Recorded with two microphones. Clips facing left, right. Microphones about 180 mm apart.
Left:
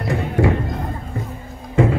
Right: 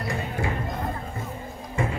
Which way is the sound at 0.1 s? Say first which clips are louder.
Left 12 dB; 75° left (ahead or behind).